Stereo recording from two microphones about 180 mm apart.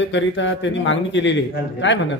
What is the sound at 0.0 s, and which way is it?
A man's voice, 90° left.